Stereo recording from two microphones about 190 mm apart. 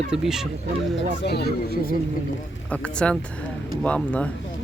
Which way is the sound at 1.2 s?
60° left (ahead or behind).